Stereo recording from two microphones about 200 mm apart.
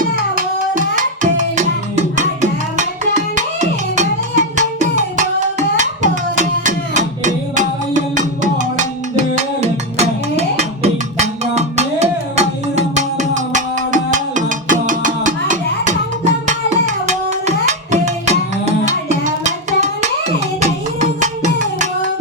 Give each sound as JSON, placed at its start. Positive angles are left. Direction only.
{"t": 0.0, "sound": "music", "side_deg": -40}